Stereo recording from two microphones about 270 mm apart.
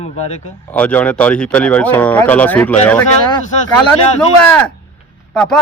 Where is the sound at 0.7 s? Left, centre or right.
Centre.